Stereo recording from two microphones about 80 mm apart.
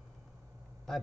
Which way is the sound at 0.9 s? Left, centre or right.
Centre.